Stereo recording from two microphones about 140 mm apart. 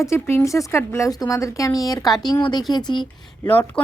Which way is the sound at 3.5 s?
10° left (ahead or behind).